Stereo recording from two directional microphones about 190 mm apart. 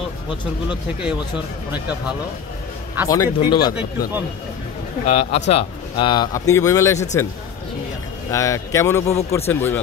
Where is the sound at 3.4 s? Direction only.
25° left (ahead or behind).